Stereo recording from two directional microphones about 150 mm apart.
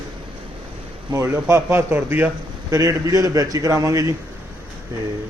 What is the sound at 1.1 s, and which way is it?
A man's voice, 20° right (ahead or behind).